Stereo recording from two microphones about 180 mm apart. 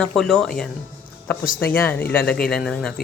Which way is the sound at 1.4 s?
50° left (ahead or behind).